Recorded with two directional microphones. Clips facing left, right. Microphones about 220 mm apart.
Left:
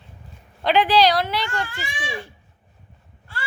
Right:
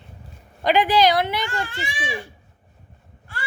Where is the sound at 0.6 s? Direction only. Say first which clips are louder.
Even; 15° right (ahead or behind).